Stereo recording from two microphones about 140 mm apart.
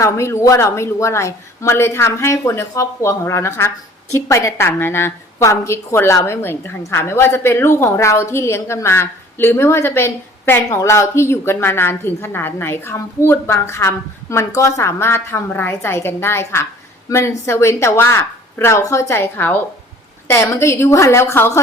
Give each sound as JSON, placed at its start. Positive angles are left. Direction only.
{"t": 0.0, "sound": "a woman's voice", "side_deg": 20}